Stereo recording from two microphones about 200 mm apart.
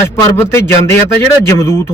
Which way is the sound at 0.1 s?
15° left (ahead or behind).